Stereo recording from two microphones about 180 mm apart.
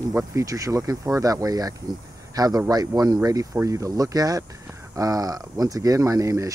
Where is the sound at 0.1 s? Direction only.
15° right (ahead or behind).